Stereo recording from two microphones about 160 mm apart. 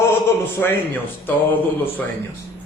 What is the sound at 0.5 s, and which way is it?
A man's voice, 10° left (ahead or behind).